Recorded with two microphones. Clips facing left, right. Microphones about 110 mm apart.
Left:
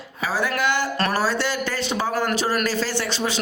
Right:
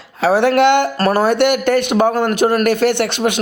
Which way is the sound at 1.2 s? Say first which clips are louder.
Right 9 dB; 60° right (ahead or behind).